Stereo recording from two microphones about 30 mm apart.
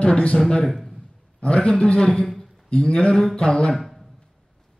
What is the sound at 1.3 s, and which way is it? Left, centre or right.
A man's voice, left.